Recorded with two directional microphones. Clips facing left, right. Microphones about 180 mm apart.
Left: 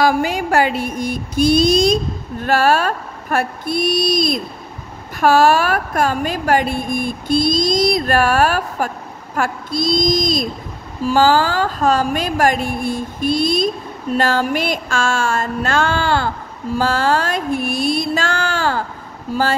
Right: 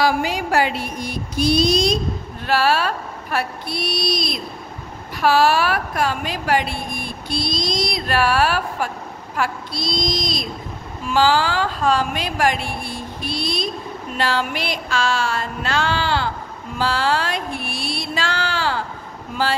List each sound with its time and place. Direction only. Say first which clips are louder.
0.0 s a woman's voice: left 3 dB; 50° left (ahead or behind)